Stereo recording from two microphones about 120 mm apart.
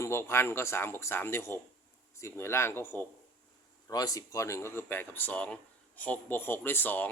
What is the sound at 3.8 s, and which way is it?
Speech, 30° left (ahead or behind).